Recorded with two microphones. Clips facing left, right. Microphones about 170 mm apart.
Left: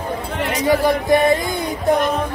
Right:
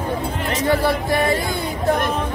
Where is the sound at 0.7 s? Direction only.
15° left (ahead or behind).